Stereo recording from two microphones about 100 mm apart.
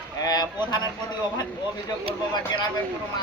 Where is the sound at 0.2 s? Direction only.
40° left (ahead or behind).